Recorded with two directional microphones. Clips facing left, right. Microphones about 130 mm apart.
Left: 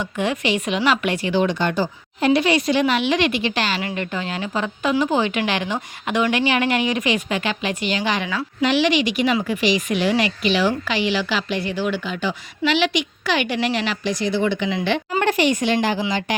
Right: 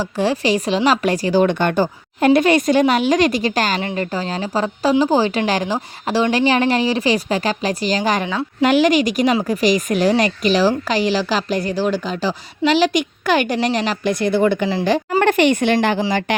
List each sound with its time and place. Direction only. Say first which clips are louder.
0.0 s speech: right 4 dB; 35° right (ahead or behind)
1.5 s a woman's voice: right 4 dB; 55° right (ahead or behind)
3.8 s speech: right 4 dB; 30° right (ahead or behind)
14.1 s a woman's voice: right 5 dB; 55° right (ahead or behind)
14.7 s speech: right 4 dB; 35° right (ahead or behind)
15.2 s a woman's voice: right 4 dB; 55° right (ahead or behind)
16.0 s speech: right 4 dB; 40° right (ahead or behind)